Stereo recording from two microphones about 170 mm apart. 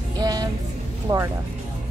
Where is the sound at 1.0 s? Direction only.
20° right (ahead or behind).